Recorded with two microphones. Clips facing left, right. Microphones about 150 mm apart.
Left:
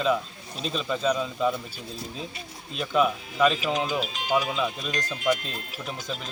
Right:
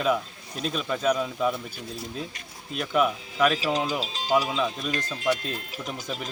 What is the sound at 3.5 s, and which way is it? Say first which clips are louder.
Speech: even; 35° right (ahead or behind).